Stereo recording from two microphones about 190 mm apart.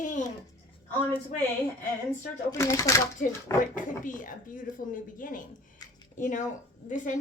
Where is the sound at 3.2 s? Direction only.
45° left (ahead or behind).